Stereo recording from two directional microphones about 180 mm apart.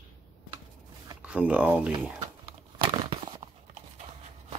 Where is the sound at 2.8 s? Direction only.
25° right (ahead or behind).